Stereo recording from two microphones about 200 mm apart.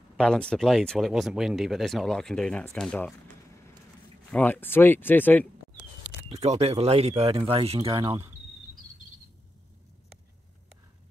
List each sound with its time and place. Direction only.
0.2 s speech: 5° left (ahead or behind)
4.3 s speech: 10° left (ahead or behind)
6.3 s speech: 35° right (ahead or behind)